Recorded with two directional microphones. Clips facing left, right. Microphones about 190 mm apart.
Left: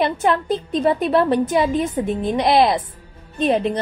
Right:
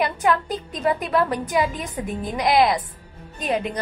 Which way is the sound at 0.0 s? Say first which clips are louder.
Left 3 dB; 25° left (ahead or behind).